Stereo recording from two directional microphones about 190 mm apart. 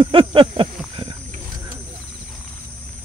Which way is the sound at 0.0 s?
30° right (ahead or behind).